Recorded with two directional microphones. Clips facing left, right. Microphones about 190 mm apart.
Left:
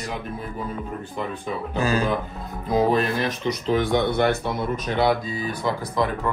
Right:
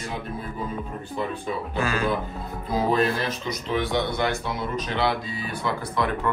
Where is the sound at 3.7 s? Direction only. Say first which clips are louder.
Left 3 dB; 50° left (ahead or behind).